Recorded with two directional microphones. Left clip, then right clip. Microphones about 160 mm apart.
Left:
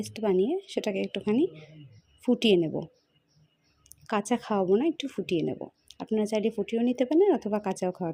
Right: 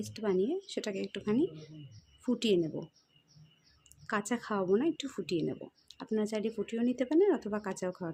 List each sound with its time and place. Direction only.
0.0 s speech: 25° left (ahead or behind)
4.0 s speech: 25° left (ahead or behind)